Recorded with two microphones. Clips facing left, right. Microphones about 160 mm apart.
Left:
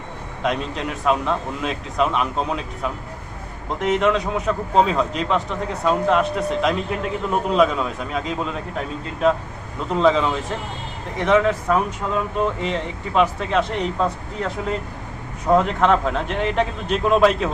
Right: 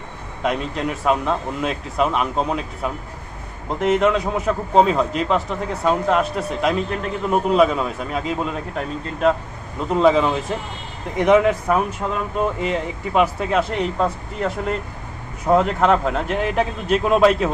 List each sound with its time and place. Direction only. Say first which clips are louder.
0.4 s a man's voice: right 2 dB; 5° right (ahead or behind)
9.9 s a man's voice: right 2 dB; 5° right (ahead or behind)